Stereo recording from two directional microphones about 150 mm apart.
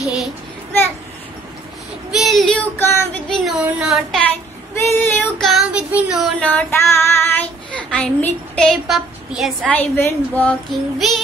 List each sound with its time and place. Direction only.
0.0 s child singing: centre (ahead or behind)
2.0 s child singing: centre (ahead or behind)
2.8 s child singing: 15° left (ahead or behind)
3.3 s a sound: centre (ahead or behind)
4.8 s child singing: 15° left (ahead or behind)
5.4 s child singing: centre (ahead or behind)
6.5 s child singing: 15° left (ahead or behind); by 9.7 s centre (ahead or behind)
9.7 s a woman's voice: 10° left (ahead or behind)